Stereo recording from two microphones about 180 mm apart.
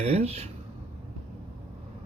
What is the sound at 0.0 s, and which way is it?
Speech, 35° right (ahead or behind).